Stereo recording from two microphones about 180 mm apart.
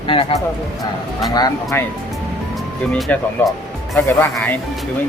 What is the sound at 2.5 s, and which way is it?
Speech, 5° left (ahead or behind).